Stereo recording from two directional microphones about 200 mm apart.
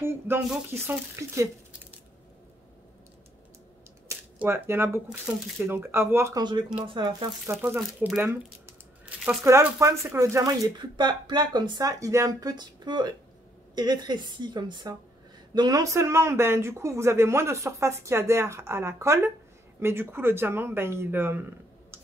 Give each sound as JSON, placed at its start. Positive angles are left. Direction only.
{"t": 0.5, "sound": "speech", "side_deg": -10}
{"t": 4.1, "sound": "speech", "side_deg": -10}
{"t": 7.5, "sound": "speech", "side_deg": -10}